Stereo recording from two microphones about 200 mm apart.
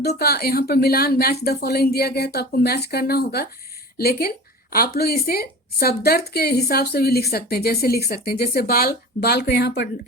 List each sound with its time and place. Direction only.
0.0 s speech: 50° left (ahead or behind)